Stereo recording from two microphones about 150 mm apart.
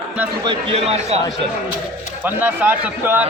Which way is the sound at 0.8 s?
45° right (ahead or behind).